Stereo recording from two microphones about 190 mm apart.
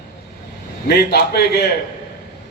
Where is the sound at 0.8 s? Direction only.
55° left (ahead or behind).